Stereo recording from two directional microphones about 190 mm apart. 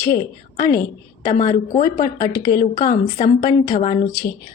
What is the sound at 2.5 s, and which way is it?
A woman's voice, 45° left (ahead or behind).